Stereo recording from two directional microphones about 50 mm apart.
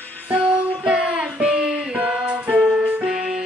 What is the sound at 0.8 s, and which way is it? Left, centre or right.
Music, right.